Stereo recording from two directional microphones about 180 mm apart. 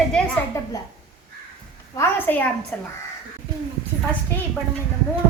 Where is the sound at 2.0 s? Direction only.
10° left (ahead or behind).